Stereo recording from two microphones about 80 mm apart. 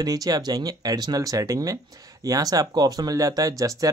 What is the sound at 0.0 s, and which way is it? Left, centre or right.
Speech, right.